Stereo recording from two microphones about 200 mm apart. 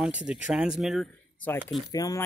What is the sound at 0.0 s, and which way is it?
Speech, 5° right (ahead or behind).